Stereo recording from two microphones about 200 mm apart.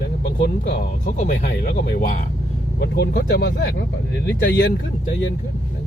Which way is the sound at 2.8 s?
55° left (ahead or behind).